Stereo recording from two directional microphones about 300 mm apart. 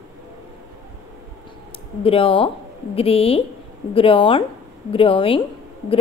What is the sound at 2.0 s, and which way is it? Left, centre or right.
A woman's voice, centre.